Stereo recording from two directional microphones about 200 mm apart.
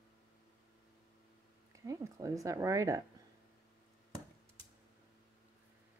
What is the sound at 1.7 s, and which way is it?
A woman's voice, 15° right (ahead or behind).